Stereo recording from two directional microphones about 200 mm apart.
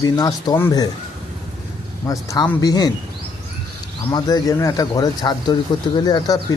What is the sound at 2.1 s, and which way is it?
Speech, 20° left (ahead or behind).